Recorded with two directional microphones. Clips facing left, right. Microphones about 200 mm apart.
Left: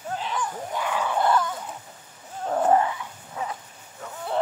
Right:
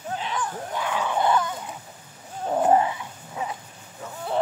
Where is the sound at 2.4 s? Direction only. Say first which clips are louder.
Right 1 dB; 15° right (ahead or behind).